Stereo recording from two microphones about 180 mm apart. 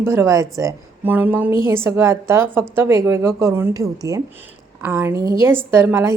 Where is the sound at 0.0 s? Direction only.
15° right (ahead or behind).